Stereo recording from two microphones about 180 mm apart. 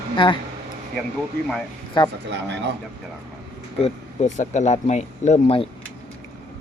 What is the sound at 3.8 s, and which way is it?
Speech, 40° left (ahead or behind).